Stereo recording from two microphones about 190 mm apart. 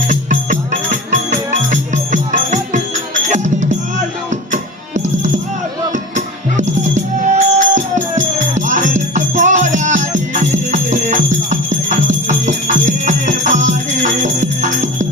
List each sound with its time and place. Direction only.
0.1 s music: 40° right (ahead or behind)